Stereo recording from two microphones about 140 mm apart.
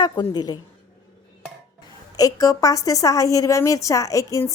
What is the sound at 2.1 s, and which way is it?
A woman's voice, 25° left (ahead or behind).